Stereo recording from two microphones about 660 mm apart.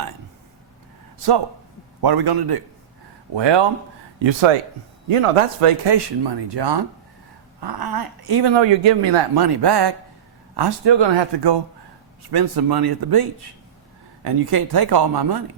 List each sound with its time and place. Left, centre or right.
2.0 s speech: right
14.3 s speech: right